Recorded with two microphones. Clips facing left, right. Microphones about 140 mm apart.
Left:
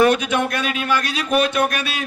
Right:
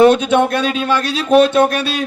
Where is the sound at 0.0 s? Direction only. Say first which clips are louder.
Right 6 dB; 30° right (ahead or behind).